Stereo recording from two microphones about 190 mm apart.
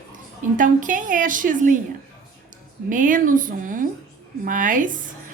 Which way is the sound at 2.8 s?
45° right (ahead or behind).